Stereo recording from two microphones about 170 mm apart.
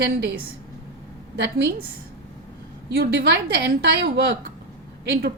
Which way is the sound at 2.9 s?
75° right (ahead or behind).